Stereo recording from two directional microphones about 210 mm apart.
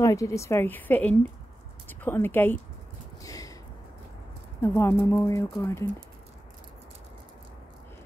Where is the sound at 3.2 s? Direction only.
15° left (ahead or behind).